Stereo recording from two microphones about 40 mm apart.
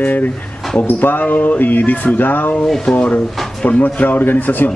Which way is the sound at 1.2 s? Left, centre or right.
Left.